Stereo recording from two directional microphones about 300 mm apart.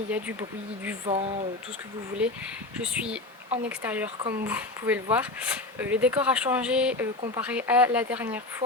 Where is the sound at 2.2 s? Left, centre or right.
Centre.